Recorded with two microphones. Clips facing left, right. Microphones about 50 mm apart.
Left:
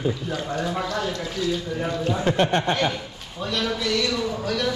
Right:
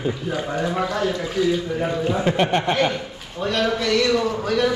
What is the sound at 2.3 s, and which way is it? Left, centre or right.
Speech, right.